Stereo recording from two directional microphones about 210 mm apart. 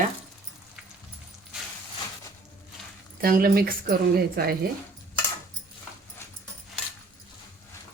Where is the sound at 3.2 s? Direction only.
45° right (ahead or behind).